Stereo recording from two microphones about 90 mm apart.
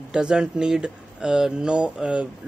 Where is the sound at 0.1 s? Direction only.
10° right (ahead or behind).